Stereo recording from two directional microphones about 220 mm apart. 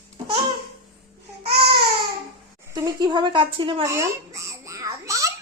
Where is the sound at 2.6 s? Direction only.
15° right (ahead or behind).